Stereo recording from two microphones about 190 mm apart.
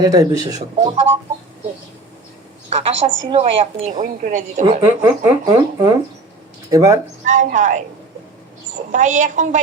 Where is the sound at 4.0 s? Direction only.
40° right (ahead or behind).